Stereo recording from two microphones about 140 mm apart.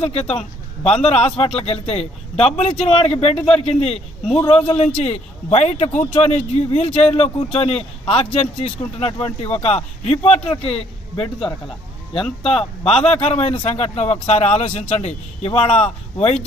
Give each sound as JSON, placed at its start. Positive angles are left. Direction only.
{"t": 0.0, "sound": "speech", "side_deg": 50}